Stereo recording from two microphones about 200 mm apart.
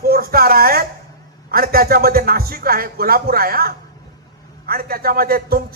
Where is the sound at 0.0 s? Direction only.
50° right (ahead or behind).